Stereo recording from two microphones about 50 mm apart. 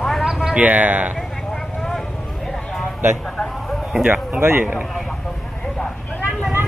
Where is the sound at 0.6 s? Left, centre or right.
Right.